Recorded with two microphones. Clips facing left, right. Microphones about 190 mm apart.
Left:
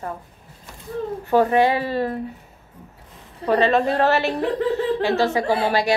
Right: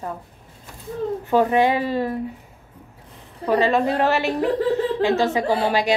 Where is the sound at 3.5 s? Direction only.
15° right (ahead or behind).